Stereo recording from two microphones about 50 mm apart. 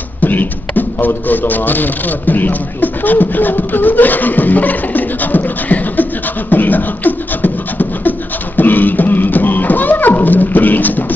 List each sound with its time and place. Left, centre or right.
0.2 s a man's voice: left
6.5 s beatboxing: left